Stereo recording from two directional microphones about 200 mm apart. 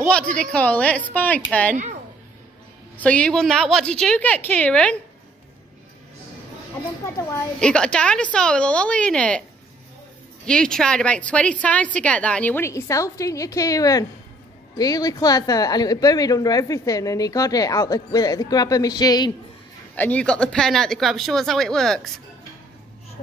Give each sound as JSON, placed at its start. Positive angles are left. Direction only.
{"t": 0.4, "sound": "speech", "side_deg": 5}
{"t": 3.0, "sound": "a woman's voice", "side_deg": 5}
{"t": 7.2, "sound": "a woman's voice", "side_deg": 15}
{"t": 10.4, "sound": "a woman's voice", "side_deg": 5}
{"t": 20.0, "sound": "a woman's voice", "side_deg": 5}